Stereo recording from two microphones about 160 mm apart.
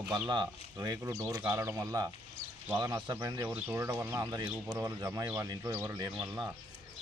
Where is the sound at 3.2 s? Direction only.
15° right (ahead or behind).